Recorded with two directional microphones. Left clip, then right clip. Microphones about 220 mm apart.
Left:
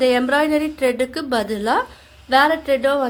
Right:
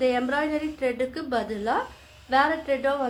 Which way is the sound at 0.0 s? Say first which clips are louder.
Left 8 dB; 50° left (ahead or behind).